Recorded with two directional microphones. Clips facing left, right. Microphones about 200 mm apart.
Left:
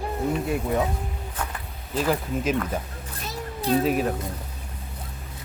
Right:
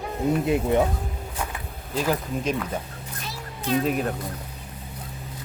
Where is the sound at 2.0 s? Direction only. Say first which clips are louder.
Left 1 dB; 5° right (ahead or behind).